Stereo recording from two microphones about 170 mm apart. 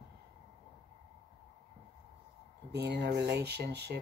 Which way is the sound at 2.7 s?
85° right.